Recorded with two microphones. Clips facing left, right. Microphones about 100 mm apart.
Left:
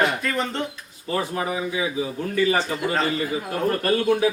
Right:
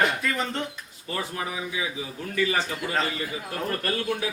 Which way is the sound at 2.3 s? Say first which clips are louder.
Left 4 dB; 35° left (ahead or behind).